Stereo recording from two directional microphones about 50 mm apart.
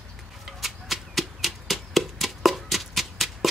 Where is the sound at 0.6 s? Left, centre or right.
Centre.